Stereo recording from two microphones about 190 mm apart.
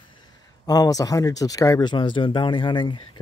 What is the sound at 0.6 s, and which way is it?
Speech, 20° left (ahead or behind).